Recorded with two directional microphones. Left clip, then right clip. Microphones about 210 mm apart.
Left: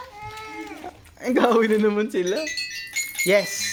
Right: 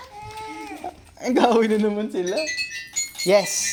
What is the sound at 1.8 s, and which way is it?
Speech, 15° left (ahead or behind).